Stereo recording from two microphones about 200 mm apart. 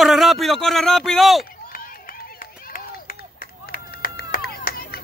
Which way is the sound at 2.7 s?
45° left (ahead or behind).